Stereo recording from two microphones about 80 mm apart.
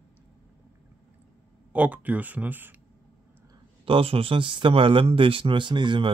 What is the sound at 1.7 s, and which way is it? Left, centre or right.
Speech, centre.